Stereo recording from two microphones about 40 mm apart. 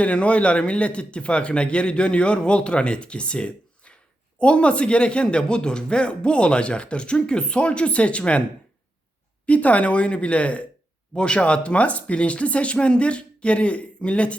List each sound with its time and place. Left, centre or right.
0.0 s a man's voice: left
9.5 s speech: left